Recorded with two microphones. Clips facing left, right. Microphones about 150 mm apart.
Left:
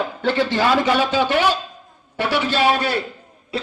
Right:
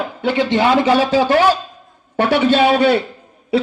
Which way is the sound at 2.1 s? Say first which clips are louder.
Right 7 dB; 55° right (ahead or behind).